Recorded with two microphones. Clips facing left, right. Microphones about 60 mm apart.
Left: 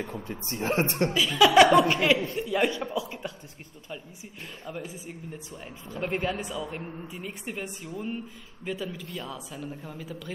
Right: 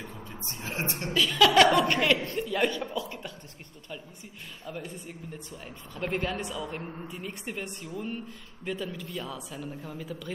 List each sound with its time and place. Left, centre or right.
0.0 s speech: left
1.1 s speech: centre
4.6 s speech: centre